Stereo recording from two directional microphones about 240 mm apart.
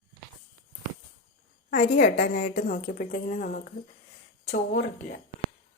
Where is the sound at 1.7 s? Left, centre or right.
Left.